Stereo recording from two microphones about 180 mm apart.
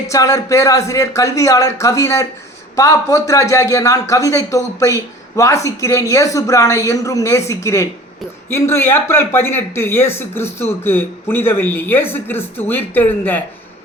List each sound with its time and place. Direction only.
0.1 s speech: 15° left (ahead or behind)